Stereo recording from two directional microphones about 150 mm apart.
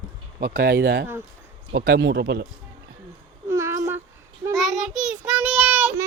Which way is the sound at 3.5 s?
20° right (ahead or behind).